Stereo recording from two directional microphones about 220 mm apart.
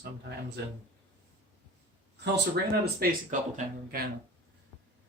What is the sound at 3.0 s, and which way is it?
Speech, 40° right (ahead or behind).